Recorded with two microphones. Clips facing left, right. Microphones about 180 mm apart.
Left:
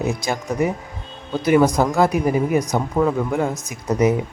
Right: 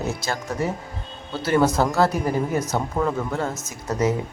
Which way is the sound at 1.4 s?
10° left (ahead or behind).